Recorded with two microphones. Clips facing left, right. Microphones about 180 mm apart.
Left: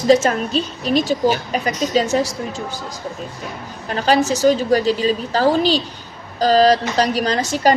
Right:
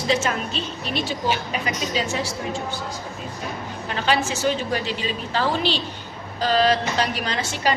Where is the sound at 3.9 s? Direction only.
40° left (ahead or behind).